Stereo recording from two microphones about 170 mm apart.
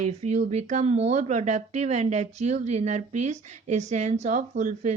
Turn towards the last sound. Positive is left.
turn(degrees=-45)  # may be behind; listen again after turning